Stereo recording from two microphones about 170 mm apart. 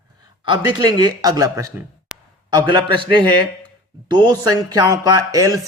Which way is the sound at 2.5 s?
25° right (ahead or behind).